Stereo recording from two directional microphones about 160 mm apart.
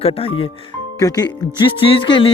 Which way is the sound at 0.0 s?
35° left (ahead or behind).